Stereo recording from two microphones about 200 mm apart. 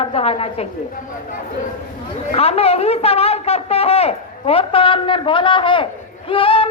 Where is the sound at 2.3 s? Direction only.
30° left (ahead or behind).